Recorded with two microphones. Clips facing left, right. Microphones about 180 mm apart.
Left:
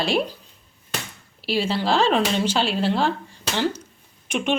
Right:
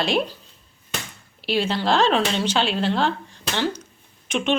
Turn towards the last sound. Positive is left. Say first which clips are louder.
# right 1 dB
turn(degrees=10)  # may be behind; listen again after turning